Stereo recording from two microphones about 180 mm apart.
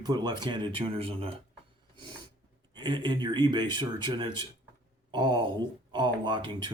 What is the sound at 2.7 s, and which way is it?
Speech, 25° right (ahead or behind).